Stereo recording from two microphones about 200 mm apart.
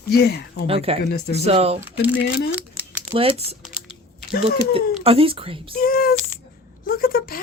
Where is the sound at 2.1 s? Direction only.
50° left (ahead or behind).